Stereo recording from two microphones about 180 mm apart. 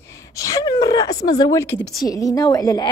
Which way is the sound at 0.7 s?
20° left (ahead or behind).